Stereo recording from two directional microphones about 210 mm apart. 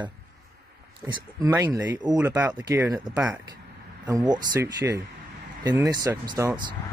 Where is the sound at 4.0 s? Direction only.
20° right (ahead or behind).